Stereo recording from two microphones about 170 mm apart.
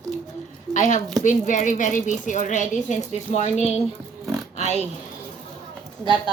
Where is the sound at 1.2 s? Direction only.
45° left (ahead or behind).